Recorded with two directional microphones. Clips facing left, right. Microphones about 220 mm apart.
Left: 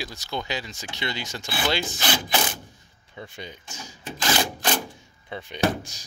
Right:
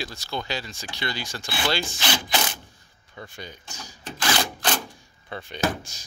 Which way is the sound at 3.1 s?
20° left (ahead or behind).